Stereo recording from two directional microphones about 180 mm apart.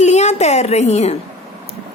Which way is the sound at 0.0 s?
40° left (ahead or behind).